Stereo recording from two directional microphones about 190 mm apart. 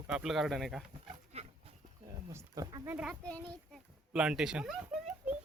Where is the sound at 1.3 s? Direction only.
35° right (ahead or behind).